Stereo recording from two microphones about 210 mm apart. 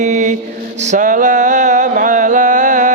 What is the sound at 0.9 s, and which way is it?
Music, 35° right (ahead or behind).